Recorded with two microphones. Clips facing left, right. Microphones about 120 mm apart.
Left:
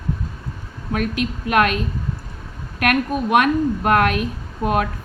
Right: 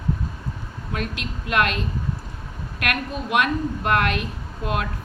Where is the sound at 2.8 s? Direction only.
50° left (ahead or behind).